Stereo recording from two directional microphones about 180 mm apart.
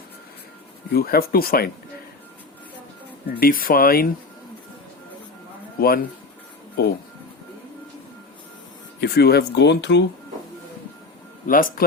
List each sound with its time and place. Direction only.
0.9 s speech: 55° left (ahead or behind)
3.4 s speech: 55° left (ahead or behind)
5.8 s speech: 55° left (ahead or behind)
9.0 s speech: 60° left (ahead or behind)
11.4 s speech: 50° left (ahead or behind)